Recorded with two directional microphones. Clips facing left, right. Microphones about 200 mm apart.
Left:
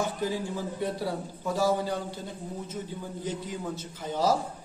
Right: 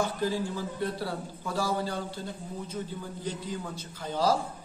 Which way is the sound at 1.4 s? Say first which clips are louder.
Left 4 dB; 20° left (ahead or behind).